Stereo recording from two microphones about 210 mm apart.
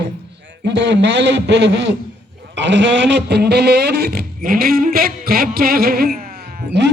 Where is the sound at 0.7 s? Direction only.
55° right (ahead or behind).